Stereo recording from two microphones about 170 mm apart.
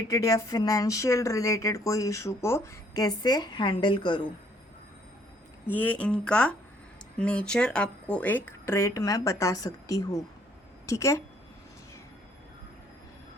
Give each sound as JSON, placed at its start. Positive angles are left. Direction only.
{"t": 0.1, "sound": "speech", "side_deg": 20}
{"t": 5.6, "sound": "speech", "side_deg": 10}